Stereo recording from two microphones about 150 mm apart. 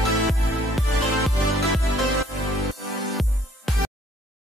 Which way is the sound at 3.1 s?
Centre (ahead or behind).